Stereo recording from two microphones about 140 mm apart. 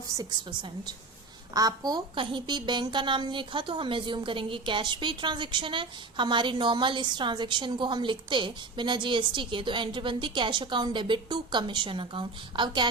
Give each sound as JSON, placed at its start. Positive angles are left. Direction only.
{"t": 1.5, "sound": "a woman's voice", "side_deg": -25}